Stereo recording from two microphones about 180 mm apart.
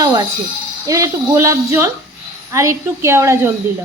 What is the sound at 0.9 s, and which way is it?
A woman's voice, 15° right (ahead or behind).